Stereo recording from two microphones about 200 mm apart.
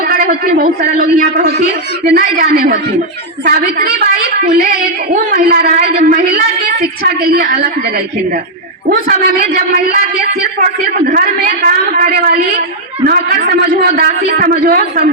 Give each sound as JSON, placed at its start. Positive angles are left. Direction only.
{"t": 0.0, "sound": "a man's voice", "side_deg": -45}
{"t": 11.1, "sound": "a man's voice", "side_deg": -45}